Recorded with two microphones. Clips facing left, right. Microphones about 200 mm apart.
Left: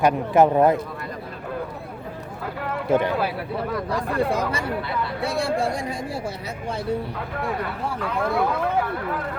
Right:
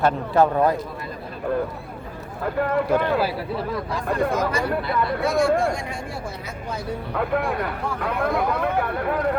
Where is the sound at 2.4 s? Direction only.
50° right (ahead or behind).